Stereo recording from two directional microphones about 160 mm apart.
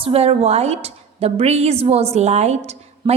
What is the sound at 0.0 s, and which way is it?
A woman's voice, 40° right (ahead or behind).